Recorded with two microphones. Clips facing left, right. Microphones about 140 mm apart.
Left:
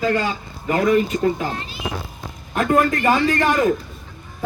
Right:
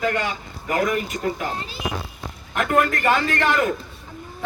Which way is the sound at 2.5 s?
30° left (ahead or behind).